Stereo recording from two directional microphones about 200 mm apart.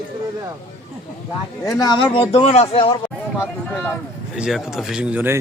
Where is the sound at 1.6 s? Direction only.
20° left (ahead or behind).